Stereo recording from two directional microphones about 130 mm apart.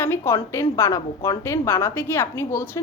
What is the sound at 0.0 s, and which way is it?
A woman's voice, 20° left (ahead or behind).